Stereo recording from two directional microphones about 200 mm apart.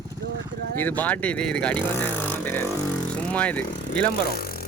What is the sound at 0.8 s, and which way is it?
Speech, 10° left (ahead or behind).